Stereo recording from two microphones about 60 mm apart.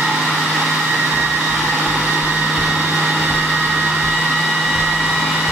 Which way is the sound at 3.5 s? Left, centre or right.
Centre.